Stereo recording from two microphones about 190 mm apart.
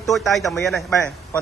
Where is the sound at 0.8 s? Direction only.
15° left (ahead or behind).